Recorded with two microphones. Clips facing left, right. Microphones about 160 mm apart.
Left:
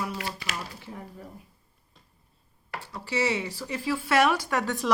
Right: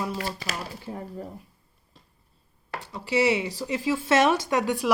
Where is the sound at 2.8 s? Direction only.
15° right (ahead or behind).